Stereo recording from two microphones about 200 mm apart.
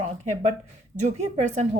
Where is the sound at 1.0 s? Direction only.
35° right (ahead or behind).